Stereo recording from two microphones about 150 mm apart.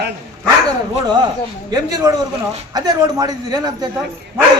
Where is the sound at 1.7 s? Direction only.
25° right (ahead or behind).